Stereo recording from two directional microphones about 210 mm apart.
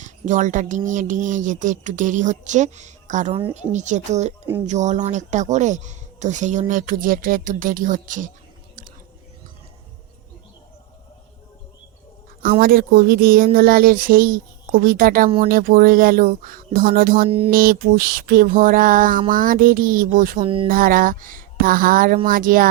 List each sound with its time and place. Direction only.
0.0 s a woman's voice: 35° right (ahead or behind)
12.4 s speech: 45° right (ahead or behind)
17.2 s speech: 25° right (ahead or behind)
17.5 s speech: 45° right (ahead or behind)
20.4 s speech: 25° right (ahead or behind)
20.7 s speech: 40° right (ahead or behind)